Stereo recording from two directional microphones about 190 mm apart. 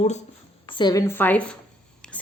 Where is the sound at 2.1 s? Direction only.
10° left (ahead or behind).